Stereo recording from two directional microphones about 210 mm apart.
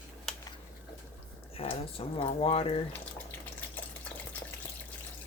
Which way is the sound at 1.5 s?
25° left (ahead or behind).